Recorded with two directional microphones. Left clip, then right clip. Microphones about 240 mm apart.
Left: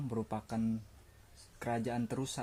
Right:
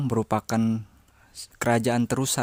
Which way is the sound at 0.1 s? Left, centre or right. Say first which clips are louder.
Right 14 dB; right.